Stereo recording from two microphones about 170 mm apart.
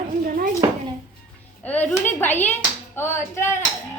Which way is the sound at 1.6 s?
10° left (ahead or behind).